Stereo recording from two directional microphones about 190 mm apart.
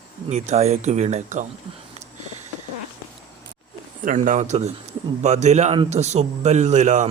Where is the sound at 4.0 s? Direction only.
45° right (ahead or behind).